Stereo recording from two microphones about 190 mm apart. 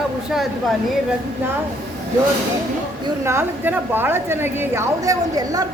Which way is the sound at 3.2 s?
10° right (ahead or behind).